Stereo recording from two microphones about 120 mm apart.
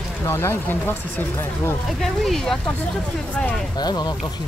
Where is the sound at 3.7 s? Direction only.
35° left (ahead or behind).